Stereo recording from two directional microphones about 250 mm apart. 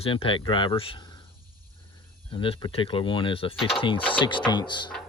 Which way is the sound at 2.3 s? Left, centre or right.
Left.